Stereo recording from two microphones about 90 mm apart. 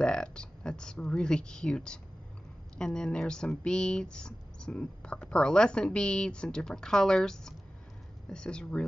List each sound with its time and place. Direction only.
0.0 s speech: 10° left (ahead or behind)